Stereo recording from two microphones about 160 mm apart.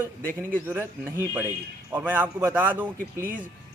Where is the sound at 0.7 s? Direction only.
15° right (ahead or behind).